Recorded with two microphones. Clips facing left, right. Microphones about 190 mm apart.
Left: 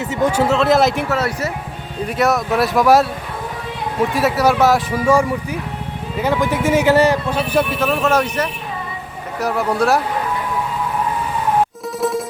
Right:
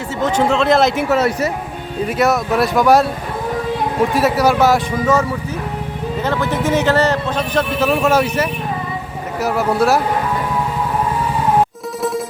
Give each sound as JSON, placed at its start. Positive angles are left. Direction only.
{"t": 0.2, "sound": "speech", "side_deg": 10}
{"t": 1.1, "sound": "speech", "side_deg": -20}
{"t": 2.0, "sound": "speech", "side_deg": 0}
{"t": 4.1, "sound": "speech", "side_deg": 0}
{"t": 6.2, "sound": "a man's voice", "side_deg": 10}
{"t": 7.8, "sound": "speech", "side_deg": -5}